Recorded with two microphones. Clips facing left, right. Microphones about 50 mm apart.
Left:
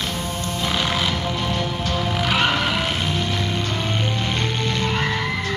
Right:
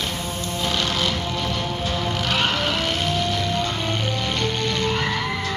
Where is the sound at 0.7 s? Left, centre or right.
Centre.